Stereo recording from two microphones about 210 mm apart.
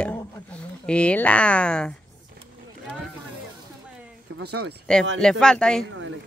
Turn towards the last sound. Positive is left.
turn(degrees=-70)  # may be behind; listen again after turning